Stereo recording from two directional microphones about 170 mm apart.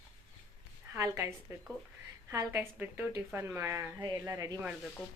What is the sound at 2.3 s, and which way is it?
A woman's voice, 15° right (ahead or behind).